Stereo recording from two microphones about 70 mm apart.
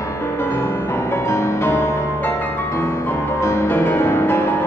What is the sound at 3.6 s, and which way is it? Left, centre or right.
Music, left.